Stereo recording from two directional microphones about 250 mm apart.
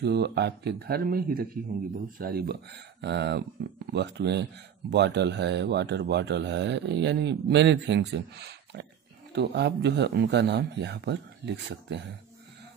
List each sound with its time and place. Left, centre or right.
0.0 s speech: right